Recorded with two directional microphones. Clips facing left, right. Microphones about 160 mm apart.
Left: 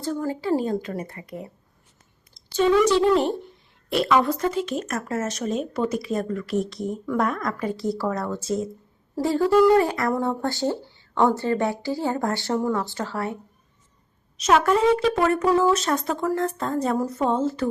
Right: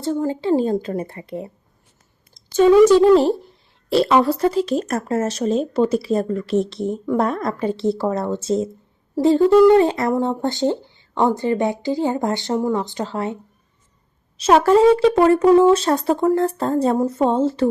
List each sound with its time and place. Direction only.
0.0 s speech: 25° right (ahead or behind)
2.5 s a woman's voice: 45° right (ahead or behind); by 13.3 s 20° right (ahead or behind)
14.3 s speech: 30° right (ahead or behind)